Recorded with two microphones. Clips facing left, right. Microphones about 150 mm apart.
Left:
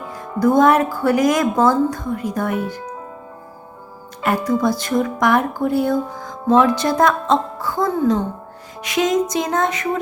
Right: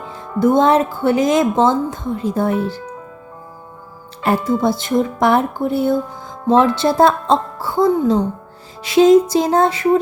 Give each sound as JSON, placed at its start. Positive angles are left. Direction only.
{"t": 0.1, "sound": "speech", "side_deg": -25}
{"t": 4.2, "sound": "speech", "side_deg": -30}
{"t": 8.8, "sound": "music", "side_deg": -30}